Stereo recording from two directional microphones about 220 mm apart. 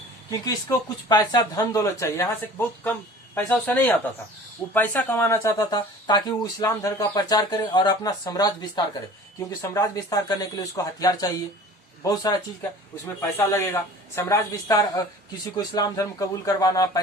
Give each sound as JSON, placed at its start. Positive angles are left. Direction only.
{"t": 0.3, "sound": "speech", "side_deg": 15}
{"t": 13.3, "sound": "speech", "side_deg": 10}